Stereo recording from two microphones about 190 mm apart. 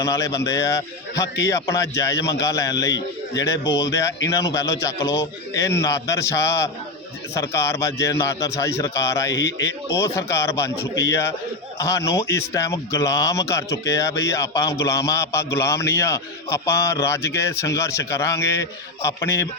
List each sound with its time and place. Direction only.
0.0 s speech: 15° left (ahead or behind)